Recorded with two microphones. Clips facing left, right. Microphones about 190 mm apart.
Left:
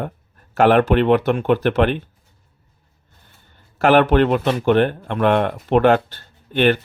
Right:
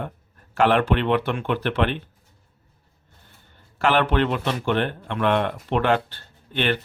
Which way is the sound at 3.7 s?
45° left (ahead or behind).